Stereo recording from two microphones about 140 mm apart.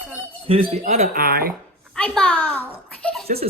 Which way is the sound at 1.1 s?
90° right.